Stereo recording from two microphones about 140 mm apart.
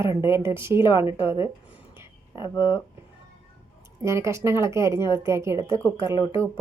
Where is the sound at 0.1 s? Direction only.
20° right (ahead or behind).